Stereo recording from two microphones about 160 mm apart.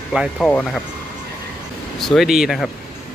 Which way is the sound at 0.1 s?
5° right (ahead or behind).